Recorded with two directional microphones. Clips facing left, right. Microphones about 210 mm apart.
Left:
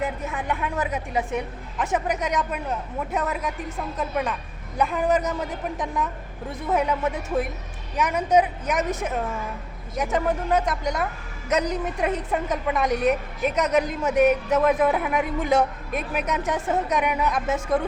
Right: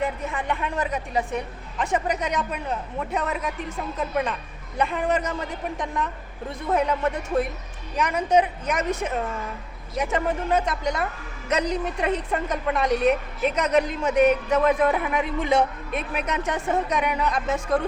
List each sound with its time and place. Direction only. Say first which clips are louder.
0.0 s a woman's voice: right 1 dB; 5° left (ahead or behind)